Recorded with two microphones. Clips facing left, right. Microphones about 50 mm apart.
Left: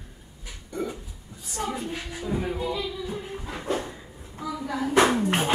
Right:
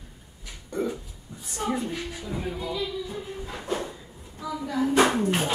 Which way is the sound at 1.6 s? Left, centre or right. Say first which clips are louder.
Right 3 dB; right.